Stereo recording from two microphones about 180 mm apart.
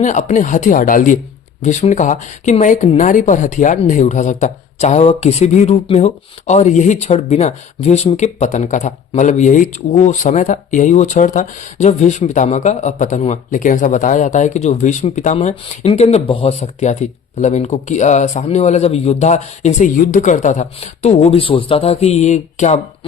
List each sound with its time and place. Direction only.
0.0 s speech: 45° left (ahead or behind)